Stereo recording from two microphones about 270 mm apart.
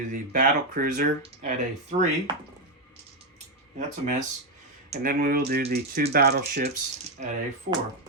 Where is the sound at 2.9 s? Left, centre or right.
Right.